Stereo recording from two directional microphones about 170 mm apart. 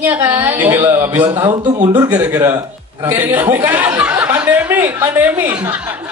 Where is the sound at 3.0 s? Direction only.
10° right (ahead or behind).